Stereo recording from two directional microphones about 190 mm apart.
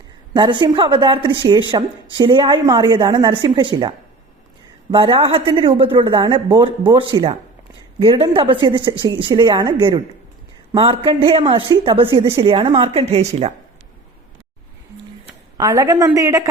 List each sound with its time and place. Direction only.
0.3 s a woman's voice: 25° right (ahead or behind)
15.5 s a woman's voice: 20° right (ahead or behind)